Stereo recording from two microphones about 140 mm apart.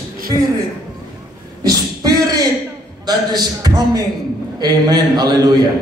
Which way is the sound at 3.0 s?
30° right (ahead or behind).